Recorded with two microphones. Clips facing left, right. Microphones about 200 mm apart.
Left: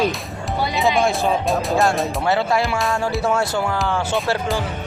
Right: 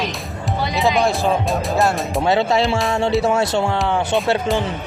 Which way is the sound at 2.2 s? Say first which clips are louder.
Right 4 dB; 20° right (ahead or behind).